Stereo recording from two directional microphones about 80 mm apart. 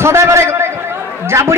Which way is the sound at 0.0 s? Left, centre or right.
Right.